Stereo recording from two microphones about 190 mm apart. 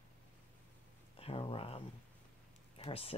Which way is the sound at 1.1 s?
30° left (ahead or behind).